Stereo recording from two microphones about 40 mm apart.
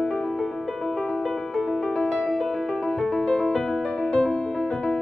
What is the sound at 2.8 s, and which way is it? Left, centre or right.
Music, centre.